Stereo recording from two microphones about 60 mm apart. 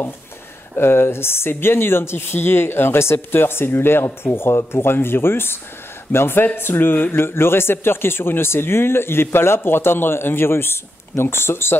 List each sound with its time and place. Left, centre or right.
0.7 s a man's voice: left